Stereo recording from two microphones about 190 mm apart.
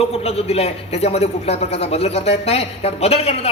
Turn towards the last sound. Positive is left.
turn(degrees=35)  # may be behind; listen again after turning